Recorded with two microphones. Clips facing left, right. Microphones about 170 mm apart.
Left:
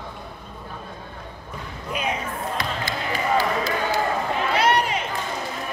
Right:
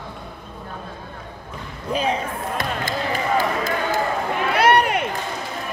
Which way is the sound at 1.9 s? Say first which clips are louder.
Right 5 dB; 30° right (ahead or behind).